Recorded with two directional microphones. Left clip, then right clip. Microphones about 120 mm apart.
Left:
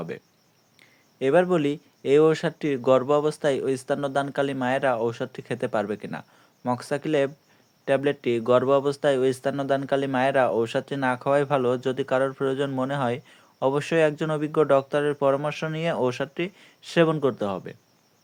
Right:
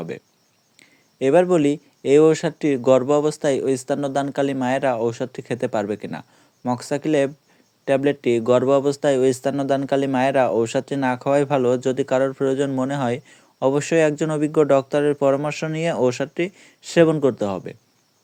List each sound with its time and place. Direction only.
0.8 s speech: 30° right (ahead or behind)